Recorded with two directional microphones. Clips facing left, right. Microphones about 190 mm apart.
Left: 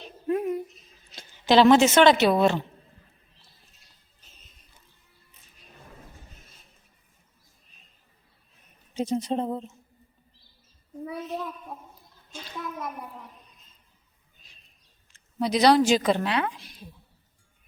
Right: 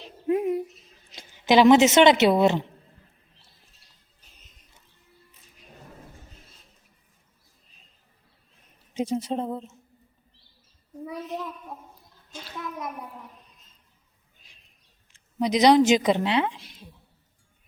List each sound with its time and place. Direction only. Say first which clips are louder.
0.3 s bird: right 2 dB; 25° right (ahead or behind)
1.1 s a woman's voice: even; 15° right (ahead or behind)
4.2 s music: even; 15° right (ahead or behind)
8.9 s a sound: right 1 dB; 15° right (ahead or behind)
9.1 s a woman's voice: left 3 dB; 5° right (ahead or behind)
12.3 s a woman's voice: even; 5° right (ahead or behind)
15.4 s a woman's voice: right 2 dB; 20° right (ahead or behind)